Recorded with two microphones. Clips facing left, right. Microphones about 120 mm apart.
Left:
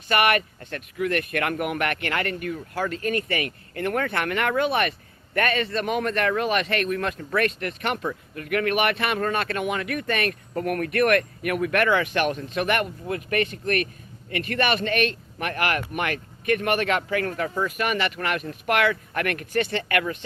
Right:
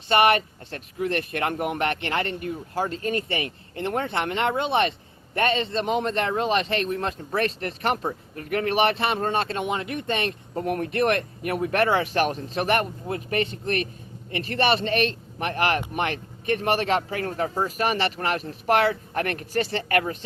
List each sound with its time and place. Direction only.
0.1 s speech: 30° right (ahead or behind)